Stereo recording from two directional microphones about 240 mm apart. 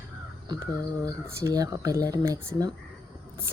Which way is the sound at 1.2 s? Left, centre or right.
Centre.